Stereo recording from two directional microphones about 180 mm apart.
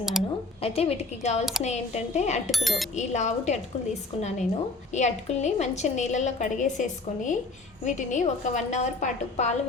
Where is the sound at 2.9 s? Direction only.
40° left (ahead or behind).